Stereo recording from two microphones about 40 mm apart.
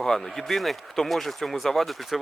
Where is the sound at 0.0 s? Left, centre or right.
Centre.